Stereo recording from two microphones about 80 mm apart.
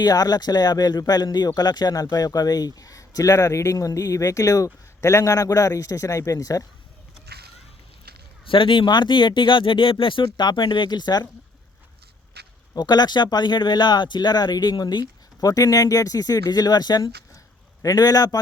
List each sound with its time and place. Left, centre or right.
0.0 s speech: left
8.4 s speech: left
12.7 s speech: left